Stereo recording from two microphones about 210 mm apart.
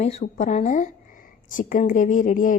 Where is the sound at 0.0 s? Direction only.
30° left (ahead or behind).